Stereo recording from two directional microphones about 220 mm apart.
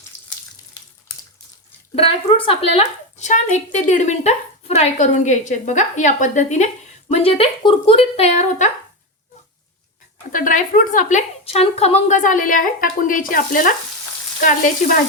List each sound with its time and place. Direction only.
2.0 s a woman's voice: 25° left (ahead or behind)
10.3 s a woman's voice: 35° left (ahead or behind)